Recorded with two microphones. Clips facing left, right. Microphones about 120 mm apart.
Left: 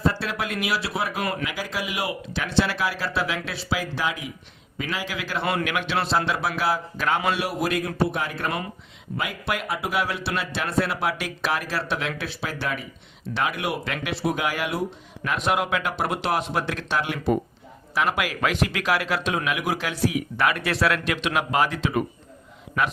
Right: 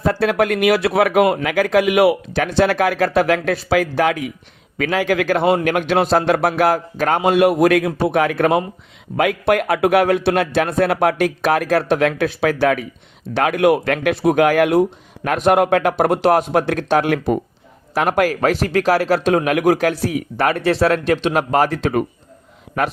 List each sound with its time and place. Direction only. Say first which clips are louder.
0.0 s a man's voice: right 9 dB; 55° right (ahead or behind)
7.3 s a man's voice: right 12 dB; 55° right (ahead or behind)
20.3 s speech: right 7 dB; 35° right (ahead or behind)